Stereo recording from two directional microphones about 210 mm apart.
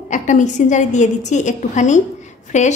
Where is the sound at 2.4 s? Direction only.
35° left (ahead or behind).